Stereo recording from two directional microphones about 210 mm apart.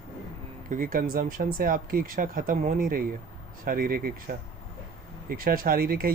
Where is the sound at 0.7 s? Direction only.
40° right (ahead or behind).